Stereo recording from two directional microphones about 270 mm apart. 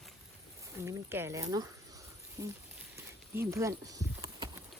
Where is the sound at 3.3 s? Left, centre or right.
Centre.